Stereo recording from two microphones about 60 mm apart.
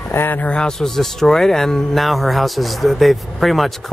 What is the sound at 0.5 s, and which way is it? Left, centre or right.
Speech, centre.